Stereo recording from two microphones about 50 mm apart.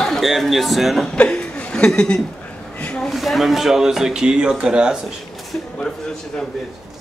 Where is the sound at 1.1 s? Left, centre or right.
Left.